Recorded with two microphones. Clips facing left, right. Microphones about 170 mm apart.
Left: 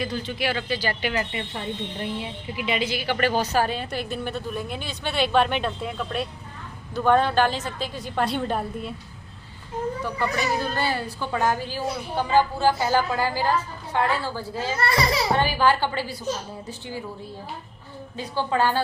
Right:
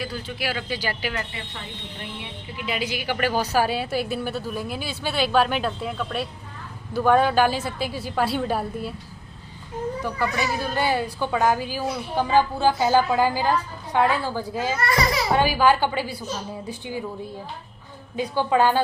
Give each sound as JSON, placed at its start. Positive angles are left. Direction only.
{"t": 0.0, "sound": "a woman's voice", "side_deg": -5}
{"t": 1.3, "sound": "speech", "side_deg": 30}
{"t": 2.6, "sound": "a woman's voice", "side_deg": 0}
{"t": 2.8, "sound": "a woman's voice", "side_deg": -15}
{"t": 10.0, "sound": "a woman's voice", "side_deg": -10}
{"t": 14.8, "sound": "a child's voice", "side_deg": 30}
{"t": 15.4, "sound": "a woman's voice", "side_deg": -10}
{"t": 18.2, "sound": "a woman's voice", "side_deg": -15}